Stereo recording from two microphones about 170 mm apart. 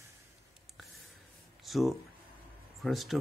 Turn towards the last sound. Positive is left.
turn(degrees=0)  # may be behind; listen again after turning